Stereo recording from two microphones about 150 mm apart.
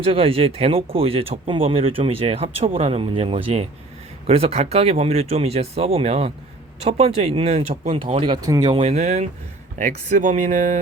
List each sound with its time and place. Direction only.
0.0 s speech: 40° right (ahead or behind)
7.9 s speech: 35° right (ahead or behind)
8.7 s speech: 45° right (ahead or behind)